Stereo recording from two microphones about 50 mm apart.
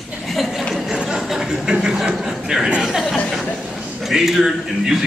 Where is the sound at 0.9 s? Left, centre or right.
Centre.